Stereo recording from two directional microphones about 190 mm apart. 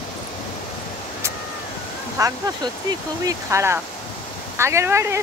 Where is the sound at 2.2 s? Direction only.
20° right (ahead or behind).